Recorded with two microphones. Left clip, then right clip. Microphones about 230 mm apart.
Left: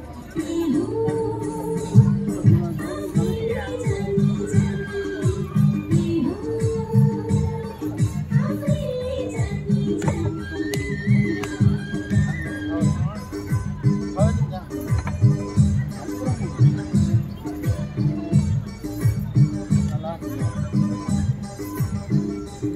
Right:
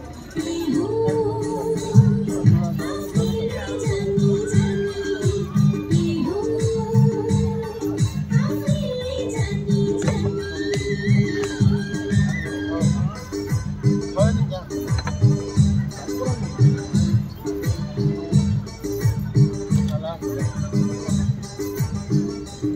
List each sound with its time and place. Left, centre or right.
0.4 s music: right